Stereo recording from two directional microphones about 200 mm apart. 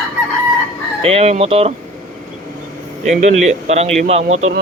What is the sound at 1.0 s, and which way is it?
Speech, 30° right (ahead or behind).